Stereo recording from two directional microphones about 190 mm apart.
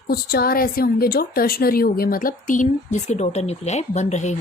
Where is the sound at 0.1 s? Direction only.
55° left (ahead or behind).